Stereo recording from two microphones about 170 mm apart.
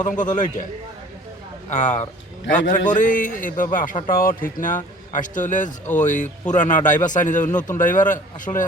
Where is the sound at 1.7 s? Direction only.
45° left (ahead or behind).